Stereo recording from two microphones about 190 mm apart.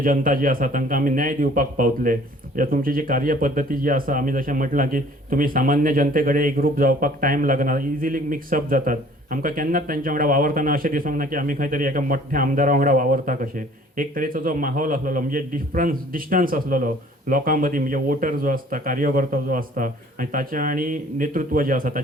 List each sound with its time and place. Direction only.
0.0 s speech: 45° right (ahead or behind)